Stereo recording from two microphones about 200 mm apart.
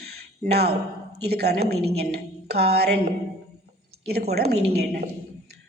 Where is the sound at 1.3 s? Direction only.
55° right (ahead or behind).